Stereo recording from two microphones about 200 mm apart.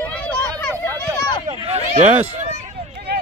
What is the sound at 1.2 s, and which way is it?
Speech, 20° left (ahead or behind).